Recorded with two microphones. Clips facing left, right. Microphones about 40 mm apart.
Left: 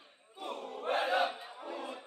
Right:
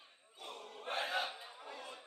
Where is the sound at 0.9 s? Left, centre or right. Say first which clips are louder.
Left 8 dB; centre.